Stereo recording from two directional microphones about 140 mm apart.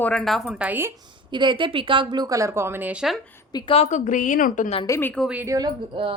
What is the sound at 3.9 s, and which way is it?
Speech, 65° left (ahead or behind).